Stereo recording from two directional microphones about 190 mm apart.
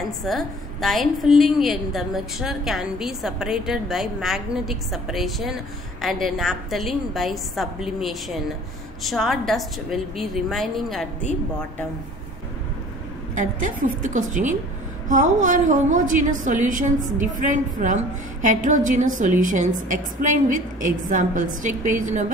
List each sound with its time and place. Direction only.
0.2 s a woman's voice: centre (ahead or behind)
13.3 s a woman's voice: 45° right (ahead or behind)